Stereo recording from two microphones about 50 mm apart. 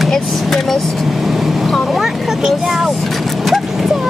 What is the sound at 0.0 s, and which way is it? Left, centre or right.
Vehicle, centre.